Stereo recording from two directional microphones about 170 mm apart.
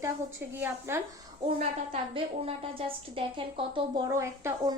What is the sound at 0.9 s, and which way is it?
Speech, 15° right (ahead or behind).